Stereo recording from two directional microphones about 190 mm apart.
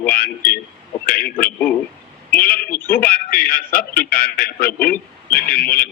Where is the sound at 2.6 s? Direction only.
10° left (ahead or behind).